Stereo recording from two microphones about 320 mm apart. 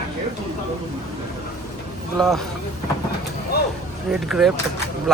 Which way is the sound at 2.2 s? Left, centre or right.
Centre.